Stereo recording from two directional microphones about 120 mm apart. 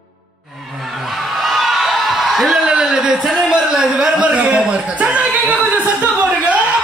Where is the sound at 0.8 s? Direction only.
Centre (ahead or behind).